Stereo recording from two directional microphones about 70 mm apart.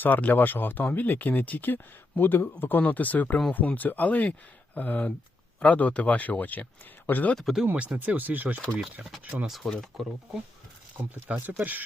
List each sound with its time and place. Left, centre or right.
0.0 s speech: left
7.3 s speech: centre
7.8 s speech: right
9.6 s speech: centre
10.9 s speech: right